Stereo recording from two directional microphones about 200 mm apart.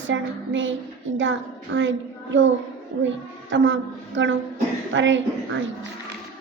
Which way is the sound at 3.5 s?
70° right (ahead or behind).